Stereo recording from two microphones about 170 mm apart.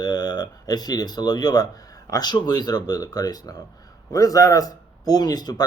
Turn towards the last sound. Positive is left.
turn(degrees=25)  # may be behind; listen again after turning